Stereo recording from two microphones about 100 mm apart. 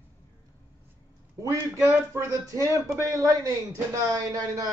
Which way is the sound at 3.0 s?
35° right (ahead or behind).